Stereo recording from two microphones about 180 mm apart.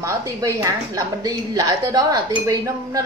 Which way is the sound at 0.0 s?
15° right (ahead or behind).